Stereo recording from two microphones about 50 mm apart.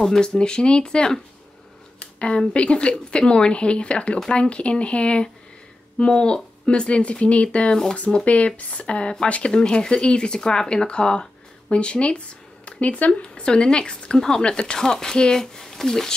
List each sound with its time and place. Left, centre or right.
0.0 s a woman's voice: centre; by 13.1 s left
13.4 s speech: centre